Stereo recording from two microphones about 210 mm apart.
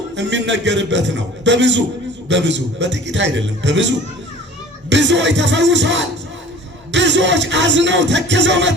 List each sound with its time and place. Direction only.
0.2 s music: 55° right (ahead or behind)
4.9 s music: 55° right (ahead or behind)